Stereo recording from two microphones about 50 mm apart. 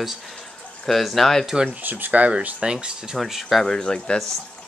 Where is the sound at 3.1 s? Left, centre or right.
Centre.